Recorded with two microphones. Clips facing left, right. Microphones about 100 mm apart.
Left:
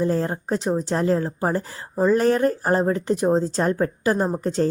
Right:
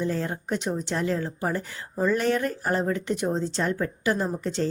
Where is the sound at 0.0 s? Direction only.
35° left (ahead or behind).